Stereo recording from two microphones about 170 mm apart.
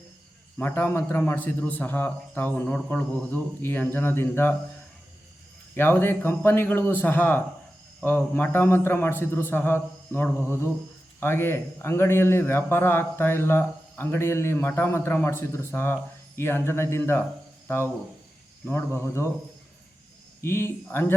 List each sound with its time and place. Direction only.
0.6 s a man's voice: 15° left (ahead or behind)
5.7 s a man's voice: 10° left (ahead or behind)
18.9 s a man's voice: 15° left (ahead or behind)
20.4 s a man's voice: 15° left (ahead or behind)